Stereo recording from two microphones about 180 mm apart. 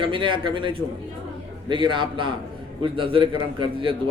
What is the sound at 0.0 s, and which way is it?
A man's voice, 25° right (ahead or behind).